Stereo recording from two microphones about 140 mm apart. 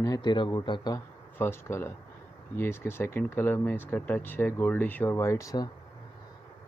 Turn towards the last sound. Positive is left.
turn(degrees=25)  # may be behind; listen again after turning